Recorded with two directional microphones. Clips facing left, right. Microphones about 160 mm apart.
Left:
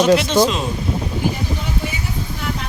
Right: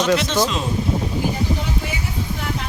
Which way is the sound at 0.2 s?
15° left (ahead or behind).